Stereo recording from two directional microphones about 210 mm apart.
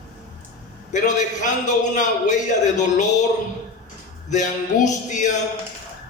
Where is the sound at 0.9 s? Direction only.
35° left (ahead or behind).